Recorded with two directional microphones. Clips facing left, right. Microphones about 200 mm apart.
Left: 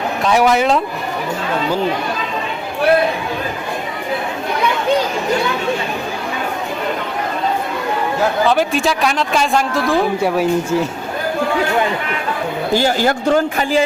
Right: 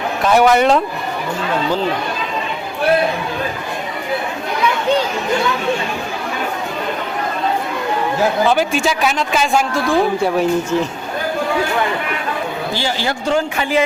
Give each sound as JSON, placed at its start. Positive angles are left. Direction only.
{"t": 0.3, "sound": "a man's voice", "side_deg": 0}
{"t": 8.4, "sound": "a man's voice", "side_deg": 0}
{"t": 12.7, "sound": "a man's voice", "side_deg": 45}